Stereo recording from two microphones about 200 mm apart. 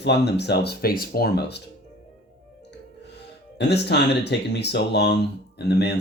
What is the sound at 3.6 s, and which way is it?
Speech, 55° left (ahead or behind).